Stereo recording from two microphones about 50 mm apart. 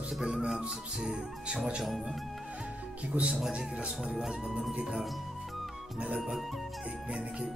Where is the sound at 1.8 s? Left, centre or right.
Centre.